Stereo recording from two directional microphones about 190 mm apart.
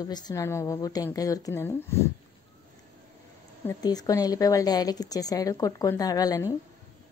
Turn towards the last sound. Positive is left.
turn(degrees=20)  # may be behind; listen again after turning